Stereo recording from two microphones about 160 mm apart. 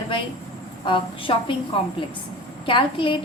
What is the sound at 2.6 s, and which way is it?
Speech, 35° left (ahead or behind).